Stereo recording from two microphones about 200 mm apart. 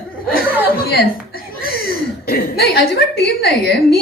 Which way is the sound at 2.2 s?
50° left (ahead or behind).